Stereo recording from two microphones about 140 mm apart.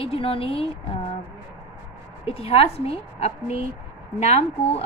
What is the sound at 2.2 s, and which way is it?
A woman's voice, 45° left (ahead or behind).